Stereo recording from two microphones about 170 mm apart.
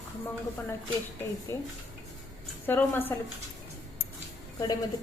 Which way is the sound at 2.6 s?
10° left (ahead or behind).